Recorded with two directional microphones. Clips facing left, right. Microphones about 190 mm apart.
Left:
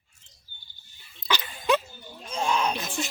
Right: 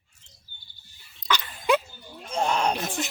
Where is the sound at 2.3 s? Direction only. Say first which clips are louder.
Right 2 dB; 60° right (ahead or behind).